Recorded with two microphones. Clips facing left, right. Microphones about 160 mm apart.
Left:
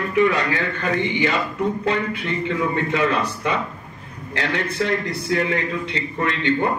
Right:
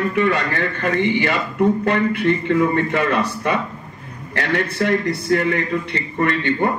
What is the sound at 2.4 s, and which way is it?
A man's voice, 55° right (ahead or behind).